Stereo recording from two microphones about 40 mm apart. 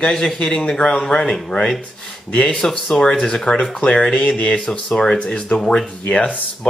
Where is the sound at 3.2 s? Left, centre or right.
Centre.